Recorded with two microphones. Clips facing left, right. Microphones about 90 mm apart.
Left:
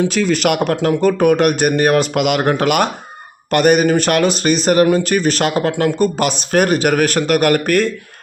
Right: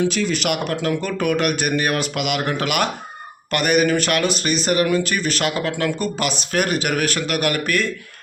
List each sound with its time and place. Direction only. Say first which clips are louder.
0.1 s speech: left 6 dB; 50° left (ahead or behind)